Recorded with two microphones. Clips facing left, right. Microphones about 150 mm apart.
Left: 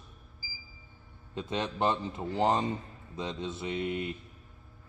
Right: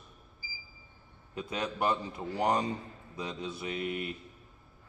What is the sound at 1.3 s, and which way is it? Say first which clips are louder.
Speech: left 2 dB; 25° left (ahead or behind).